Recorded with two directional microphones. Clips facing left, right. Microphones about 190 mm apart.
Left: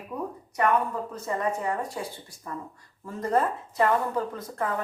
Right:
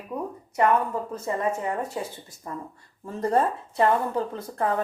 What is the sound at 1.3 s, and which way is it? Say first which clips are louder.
Speech: right 1 dB; 25° right (ahead or behind).